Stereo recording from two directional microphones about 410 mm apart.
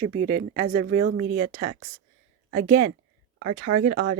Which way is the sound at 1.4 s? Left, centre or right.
Right.